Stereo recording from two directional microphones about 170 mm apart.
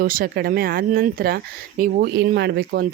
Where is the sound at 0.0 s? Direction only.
55° right (ahead or behind).